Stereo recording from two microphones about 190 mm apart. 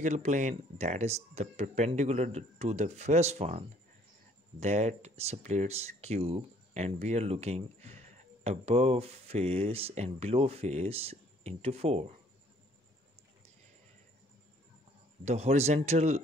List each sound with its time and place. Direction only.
0.0 s speech: 40° right (ahead or behind)
15.2 s speech: 35° right (ahead or behind)